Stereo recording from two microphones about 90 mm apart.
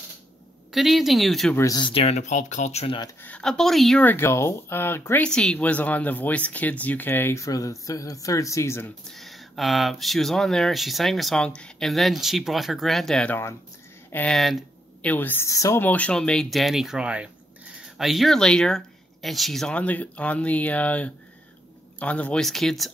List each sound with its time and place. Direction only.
0.7 s speech: 5° right (ahead or behind)
1.8 s speech: 75° left (ahead or behind)
3.2 s speech: 15° left (ahead or behind)
3.4 s speech: 5° left (ahead or behind)
4.0 s speech: 25° left (ahead or behind)
5.2 s speech: 10° left (ahead or behind); by 8.9 s 30° left (ahead or behind)
9.1 s speech: centre (ahead or behind)
14.3 s speech: centre (ahead or behind)
15.0 s a woman's voice: 20° left (ahead or behind)
15.4 s speech: 35° left (ahead or behind)
15.8 s speech: 15° left (ahead or behind)
19.7 s speech: 15° left (ahead or behind)